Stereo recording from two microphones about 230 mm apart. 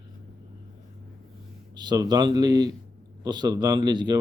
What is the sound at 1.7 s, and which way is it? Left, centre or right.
A man's voice, centre.